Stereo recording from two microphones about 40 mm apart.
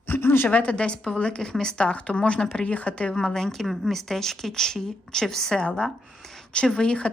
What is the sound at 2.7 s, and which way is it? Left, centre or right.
Speech, left.